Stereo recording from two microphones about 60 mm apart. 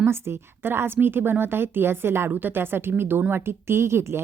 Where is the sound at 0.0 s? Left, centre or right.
Right.